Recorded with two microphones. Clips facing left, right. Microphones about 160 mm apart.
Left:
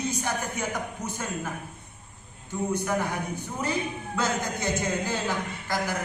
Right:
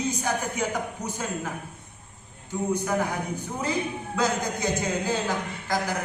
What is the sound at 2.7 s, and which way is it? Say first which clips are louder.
Speech: right 2 dB; 15° right (ahead or behind).